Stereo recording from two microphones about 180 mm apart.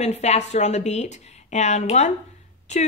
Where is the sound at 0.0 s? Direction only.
35° left (ahead or behind).